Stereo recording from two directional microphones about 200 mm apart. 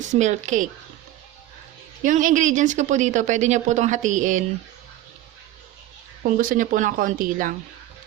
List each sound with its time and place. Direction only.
0.0 s a woman's voice: 35° right (ahead or behind)
2.0 s a woman's voice: 40° right (ahead or behind)
6.3 s a woman's voice: 45° right (ahead or behind)